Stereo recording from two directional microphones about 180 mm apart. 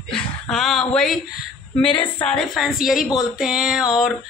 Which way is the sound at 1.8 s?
30° left (ahead or behind).